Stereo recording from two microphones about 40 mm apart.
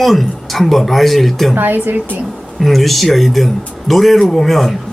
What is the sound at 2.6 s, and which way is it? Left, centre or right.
A man's voice, centre.